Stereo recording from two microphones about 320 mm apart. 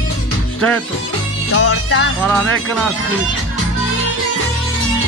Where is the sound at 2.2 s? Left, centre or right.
Centre.